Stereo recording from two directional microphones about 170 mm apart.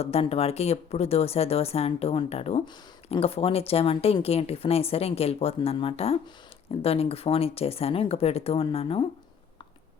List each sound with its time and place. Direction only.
0.0 s speech: 35° left (ahead or behind)